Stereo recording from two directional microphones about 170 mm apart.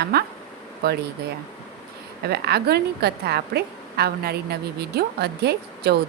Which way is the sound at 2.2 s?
70° right (ahead or behind).